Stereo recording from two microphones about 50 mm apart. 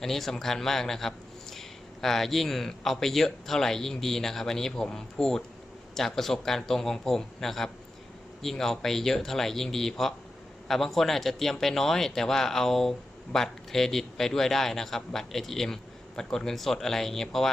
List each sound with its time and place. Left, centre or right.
0.0 s speech: centre